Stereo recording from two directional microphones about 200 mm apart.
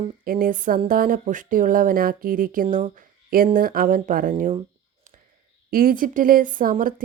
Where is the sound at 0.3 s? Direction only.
45° right (ahead or behind).